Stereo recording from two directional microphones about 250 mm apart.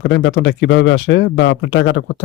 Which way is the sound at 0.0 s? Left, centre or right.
Left.